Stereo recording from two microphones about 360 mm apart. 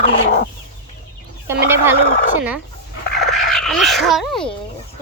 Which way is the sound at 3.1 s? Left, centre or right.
Left.